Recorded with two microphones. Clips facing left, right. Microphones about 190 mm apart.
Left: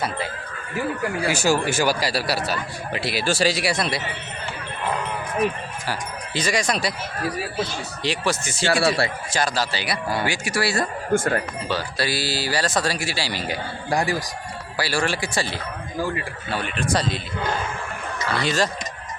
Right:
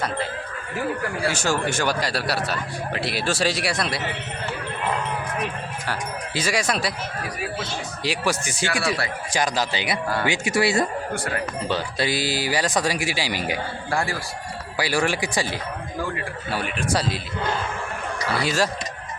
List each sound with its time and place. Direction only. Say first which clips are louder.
1.2 s speech: left 3 dB; 10° left (ahead or behind)
5.8 s speech: even; centre (ahead or behind)
8.0 s speech: left 1 dB; 10° right (ahead or behind)
8.6 s speech: left 5 dB; 30° left (ahead or behind)
9.3 s a man's voice: right 4 dB; 15° right (ahead or behind)
11.1 s speech: left 7 dB; 45° left (ahead or behind)
11.7 s speech: even; 20° right (ahead or behind)
13.9 s speech: left 3 dB; 15° left (ahead or behind)
14.8 s speech: right 1 dB; 15° right (ahead or behind)
18.3 s speech: even; 5° right (ahead or behind)